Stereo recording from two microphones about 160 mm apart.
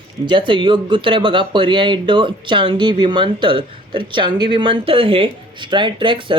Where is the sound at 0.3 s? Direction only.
30° right (ahead or behind).